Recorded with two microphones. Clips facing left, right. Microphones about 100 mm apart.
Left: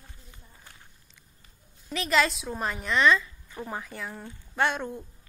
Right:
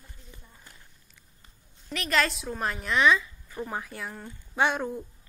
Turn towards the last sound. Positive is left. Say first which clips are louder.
# right 1 dB
turn(degrees=-5)  # may be behind; listen again after turning